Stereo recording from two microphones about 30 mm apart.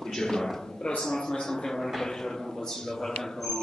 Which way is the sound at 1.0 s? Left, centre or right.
Centre.